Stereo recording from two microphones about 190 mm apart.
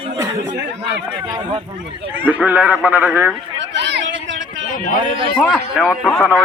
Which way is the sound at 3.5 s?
70° right (ahead or behind).